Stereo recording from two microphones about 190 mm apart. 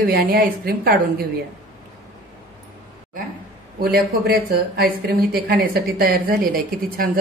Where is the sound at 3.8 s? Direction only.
55° right (ahead or behind).